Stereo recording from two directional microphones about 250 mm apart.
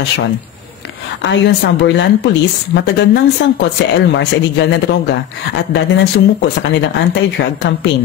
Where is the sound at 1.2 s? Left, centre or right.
Left.